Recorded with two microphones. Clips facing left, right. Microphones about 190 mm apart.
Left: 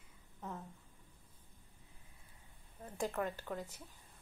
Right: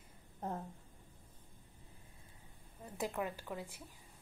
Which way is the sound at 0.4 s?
50° right (ahead or behind).